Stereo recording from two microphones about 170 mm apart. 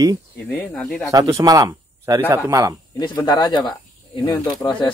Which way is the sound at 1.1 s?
20° right (ahead or behind).